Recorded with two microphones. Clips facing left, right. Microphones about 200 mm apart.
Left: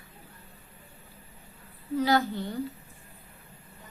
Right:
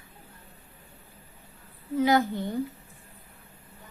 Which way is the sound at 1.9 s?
20° right (ahead or behind).